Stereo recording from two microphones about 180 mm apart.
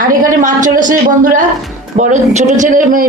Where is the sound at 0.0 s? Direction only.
50° right (ahead or behind).